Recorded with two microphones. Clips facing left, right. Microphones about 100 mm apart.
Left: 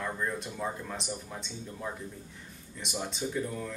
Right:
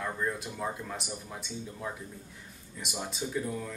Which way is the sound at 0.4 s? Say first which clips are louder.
Even; 5° right (ahead or behind).